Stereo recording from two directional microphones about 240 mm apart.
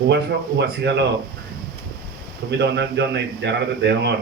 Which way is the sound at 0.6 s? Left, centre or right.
Right.